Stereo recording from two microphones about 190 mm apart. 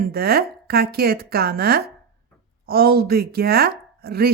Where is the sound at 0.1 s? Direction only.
55° right (ahead or behind).